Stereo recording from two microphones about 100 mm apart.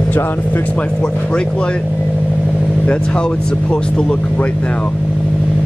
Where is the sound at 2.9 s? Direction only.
10° left (ahead or behind).